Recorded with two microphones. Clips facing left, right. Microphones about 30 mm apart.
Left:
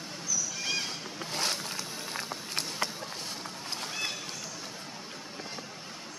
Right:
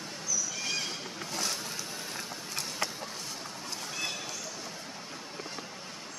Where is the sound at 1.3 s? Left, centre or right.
Left.